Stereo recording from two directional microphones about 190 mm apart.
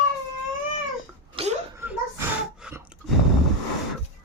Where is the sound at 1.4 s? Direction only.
30° right (ahead or behind).